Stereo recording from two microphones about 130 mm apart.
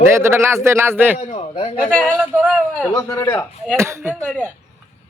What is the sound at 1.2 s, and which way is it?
Speech, 50° left (ahead or behind).